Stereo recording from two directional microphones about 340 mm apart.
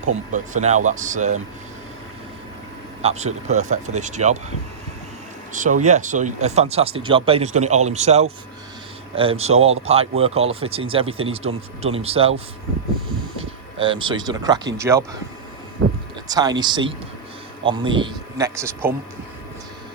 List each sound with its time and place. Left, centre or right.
0.0 s speech: right
3.0 s speech: centre
5.8 s speech: right
13.7 s speech: centre
16.3 s speech: centre